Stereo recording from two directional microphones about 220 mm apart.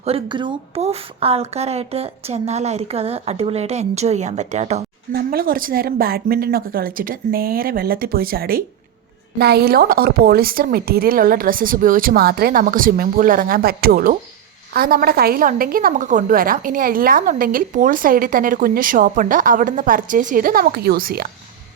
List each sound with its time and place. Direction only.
0.0 s a woman's voice: 25° right (ahead or behind)
5.1 s a woman's voice: 45° right (ahead or behind)